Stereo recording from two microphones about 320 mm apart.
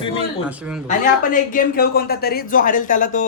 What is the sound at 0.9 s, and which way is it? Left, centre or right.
Speech, left.